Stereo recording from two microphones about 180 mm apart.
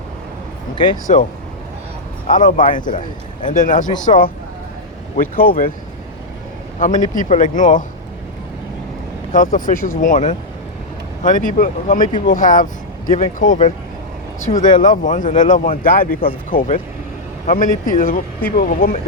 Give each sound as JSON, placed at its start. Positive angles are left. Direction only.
{"t": 1.0, "sound": "a man's voice", "side_deg": 45}
{"t": 6.7, "sound": "a man's voice", "side_deg": 45}
{"t": 9.3, "sound": "a man's voice", "side_deg": 50}
{"t": 14.5, "sound": "speech", "side_deg": 25}
{"t": 14.8, "sound": "a man's voice", "side_deg": 45}